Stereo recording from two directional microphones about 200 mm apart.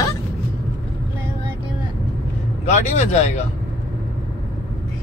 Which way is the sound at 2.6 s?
35° left (ahead or behind).